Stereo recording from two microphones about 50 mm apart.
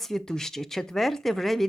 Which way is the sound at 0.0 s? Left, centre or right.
Centre.